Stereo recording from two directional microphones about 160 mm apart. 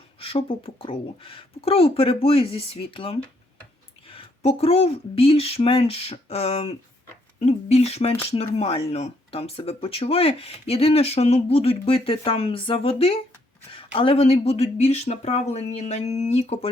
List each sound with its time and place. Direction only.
0.2 s speech: 35° left (ahead or behind)